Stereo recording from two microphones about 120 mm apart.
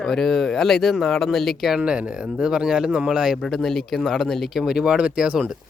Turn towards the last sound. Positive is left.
turn(degrees=-5)  # may be behind; listen again after turning